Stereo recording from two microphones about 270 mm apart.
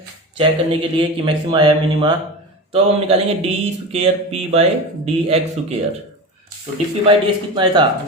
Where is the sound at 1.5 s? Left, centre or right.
Centre.